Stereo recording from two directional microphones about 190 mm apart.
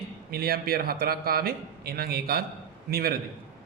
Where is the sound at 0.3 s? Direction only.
55° right (ahead or behind).